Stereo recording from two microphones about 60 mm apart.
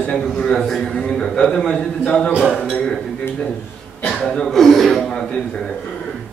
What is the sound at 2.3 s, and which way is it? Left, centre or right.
Speech, centre.